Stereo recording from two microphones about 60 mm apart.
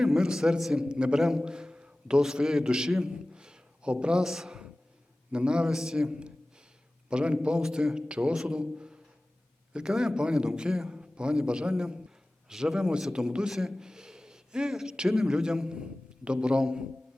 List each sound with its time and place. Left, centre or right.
0.0 s a man's voice: centre